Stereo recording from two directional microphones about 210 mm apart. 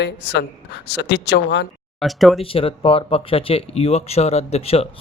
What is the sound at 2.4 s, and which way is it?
Speech, 25° left (ahead or behind).